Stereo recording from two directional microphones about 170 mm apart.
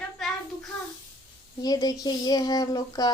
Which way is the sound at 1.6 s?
20° left (ahead or behind).